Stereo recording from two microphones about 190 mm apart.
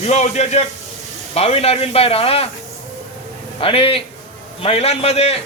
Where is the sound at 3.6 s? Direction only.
30° left (ahead or behind).